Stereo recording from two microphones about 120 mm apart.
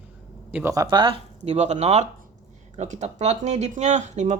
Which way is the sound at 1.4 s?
70° right (ahead or behind).